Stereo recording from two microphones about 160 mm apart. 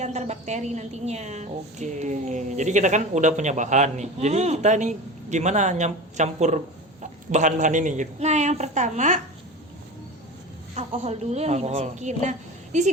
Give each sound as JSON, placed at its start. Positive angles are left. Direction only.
{"t": 0.0, "sound": "a woman's voice", "side_deg": -45}
{"t": 10.8, "sound": "a woman's voice", "side_deg": -45}